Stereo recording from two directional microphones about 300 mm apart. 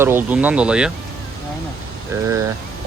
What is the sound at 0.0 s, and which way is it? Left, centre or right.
Speech, centre.